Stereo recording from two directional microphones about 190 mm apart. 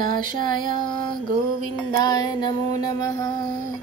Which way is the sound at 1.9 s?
20° left (ahead or behind).